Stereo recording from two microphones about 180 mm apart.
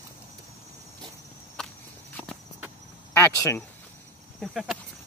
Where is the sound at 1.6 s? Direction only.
5° left (ahead or behind).